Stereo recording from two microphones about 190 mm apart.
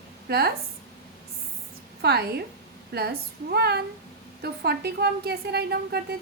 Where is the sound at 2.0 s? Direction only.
55° right (ahead or behind).